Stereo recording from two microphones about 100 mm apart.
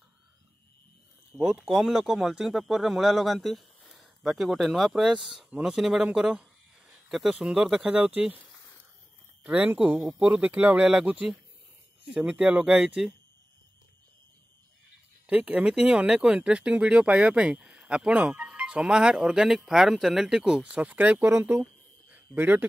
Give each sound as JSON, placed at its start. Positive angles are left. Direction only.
{"t": 1.3, "sound": "speech", "side_deg": -25}
{"t": 1.7, "sound": "speech", "side_deg": -5}
{"t": 15.2, "sound": "speech", "side_deg": -15}